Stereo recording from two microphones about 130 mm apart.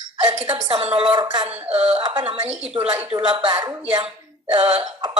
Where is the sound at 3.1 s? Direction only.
40° right (ahead or behind).